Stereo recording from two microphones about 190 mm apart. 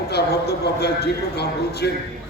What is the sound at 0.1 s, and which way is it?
A man's voice, 60° left (ahead or behind).